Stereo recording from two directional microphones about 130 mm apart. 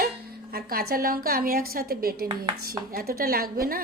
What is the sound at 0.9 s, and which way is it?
Speech, 90° right.